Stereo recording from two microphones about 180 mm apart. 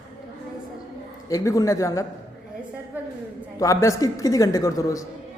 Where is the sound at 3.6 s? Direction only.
20° left (ahead or behind).